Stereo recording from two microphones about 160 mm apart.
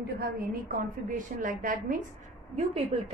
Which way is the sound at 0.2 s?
55° right (ahead or behind).